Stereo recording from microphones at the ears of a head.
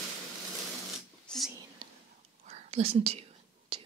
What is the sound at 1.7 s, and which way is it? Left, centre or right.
Whispering, right.